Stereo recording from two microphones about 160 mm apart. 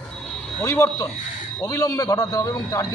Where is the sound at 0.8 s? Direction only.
20° left (ahead or behind).